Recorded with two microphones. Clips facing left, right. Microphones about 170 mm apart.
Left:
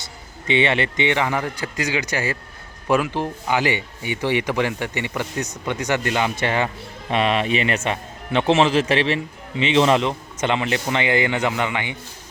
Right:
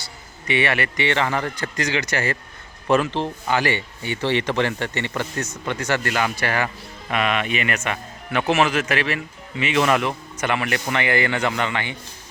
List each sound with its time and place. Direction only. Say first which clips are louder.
0.0 s speech: left 3 dB; 20° left (ahead or behind)